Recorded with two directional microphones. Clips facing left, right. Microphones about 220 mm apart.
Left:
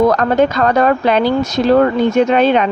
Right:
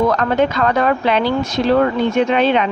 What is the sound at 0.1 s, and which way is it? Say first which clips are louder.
Speech: left 3 dB; 40° left (ahead or behind).